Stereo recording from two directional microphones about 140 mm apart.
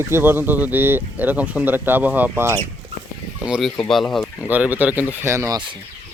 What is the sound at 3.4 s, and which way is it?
Speech, 5° right (ahead or behind).